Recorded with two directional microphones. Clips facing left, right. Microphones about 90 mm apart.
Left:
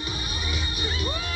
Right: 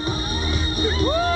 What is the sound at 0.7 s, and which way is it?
Music, 40° right (ahead or behind).